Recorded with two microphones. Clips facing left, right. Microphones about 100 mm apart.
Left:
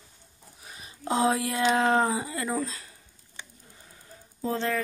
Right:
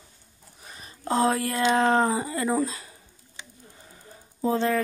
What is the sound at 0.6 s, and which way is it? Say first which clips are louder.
Speech: even; 5° left (ahead or behind).